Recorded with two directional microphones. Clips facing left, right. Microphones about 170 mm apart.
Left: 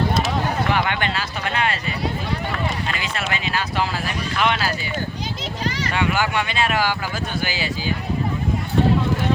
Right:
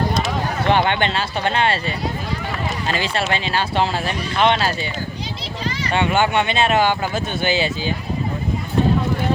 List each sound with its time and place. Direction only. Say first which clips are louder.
0.7 s speech: right 4 dB; 25° right (ahead or behind)
2.8 s speech: right 5 dB; 30° right (ahead or behind)
5.9 s speech: right 5 dB; 25° right (ahead or behind)